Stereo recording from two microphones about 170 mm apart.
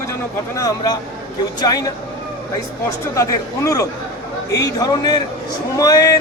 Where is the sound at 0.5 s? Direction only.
20° left (ahead or behind).